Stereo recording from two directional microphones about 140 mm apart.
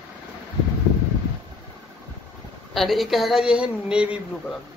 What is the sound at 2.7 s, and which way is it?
Speech, centre (ahead or behind).